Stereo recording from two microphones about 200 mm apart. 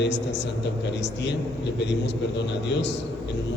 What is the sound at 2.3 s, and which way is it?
Speech, 60° left (ahead or behind).